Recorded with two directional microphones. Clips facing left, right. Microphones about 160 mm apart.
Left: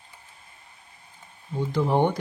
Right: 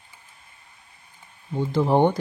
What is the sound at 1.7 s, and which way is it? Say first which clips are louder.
Speech: right 3 dB; 30° right (ahead or behind).